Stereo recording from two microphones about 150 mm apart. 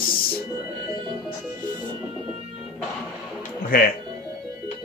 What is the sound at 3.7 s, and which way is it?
Speech, 75° left (ahead or behind).